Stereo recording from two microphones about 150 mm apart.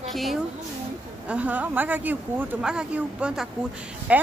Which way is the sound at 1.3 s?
10° right (ahead or behind).